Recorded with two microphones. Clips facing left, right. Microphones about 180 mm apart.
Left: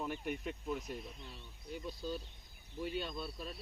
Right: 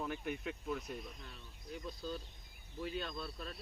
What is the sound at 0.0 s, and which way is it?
Speech, 5° left (ahead or behind).